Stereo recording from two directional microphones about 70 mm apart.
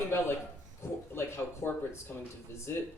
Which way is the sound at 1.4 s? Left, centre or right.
Left.